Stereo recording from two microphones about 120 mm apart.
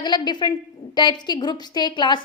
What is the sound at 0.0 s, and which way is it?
A woman's voice, 40° left (ahead or behind).